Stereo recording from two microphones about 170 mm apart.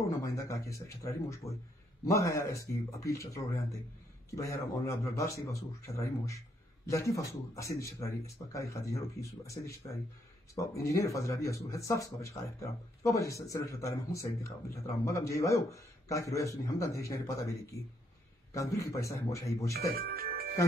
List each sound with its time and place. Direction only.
0.2 s speech: 20° left (ahead or behind)
19.9 s music: 60° right (ahead or behind)